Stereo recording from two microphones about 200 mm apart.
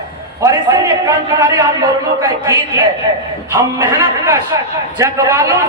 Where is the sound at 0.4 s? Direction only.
15° right (ahead or behind).